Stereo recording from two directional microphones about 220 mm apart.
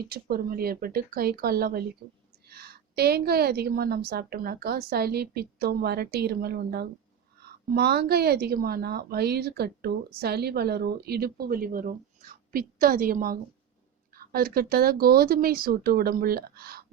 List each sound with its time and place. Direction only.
0.1 s speech: 45° right (ahead or behind)